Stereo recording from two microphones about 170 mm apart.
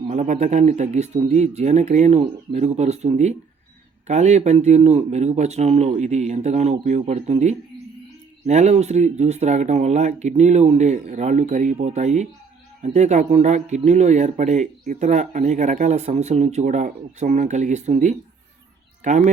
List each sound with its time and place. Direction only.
0.0 s speech: 40° right (ahead or behind)